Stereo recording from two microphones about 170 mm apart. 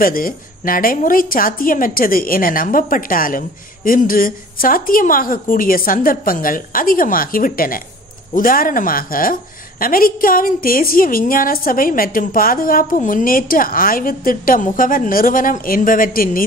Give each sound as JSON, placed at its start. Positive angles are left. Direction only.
{"t": 0.0, "sound": "a woman's voice", "side_deg": 55}